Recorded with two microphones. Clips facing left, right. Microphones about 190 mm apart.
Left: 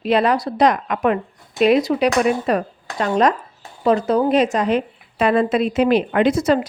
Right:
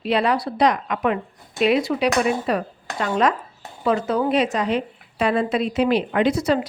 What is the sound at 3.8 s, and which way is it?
A woman's voice, 35° left (ahead or behind).